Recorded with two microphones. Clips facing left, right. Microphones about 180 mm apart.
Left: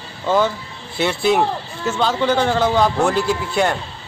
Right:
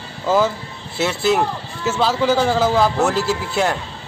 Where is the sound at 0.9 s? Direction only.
Centre (ahead or behind).